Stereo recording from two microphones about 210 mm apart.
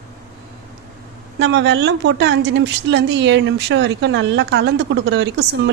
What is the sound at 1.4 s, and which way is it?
A woman's voice, 55° right (ahead or behind).